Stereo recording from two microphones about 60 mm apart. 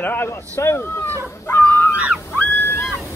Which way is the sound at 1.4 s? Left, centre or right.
Left.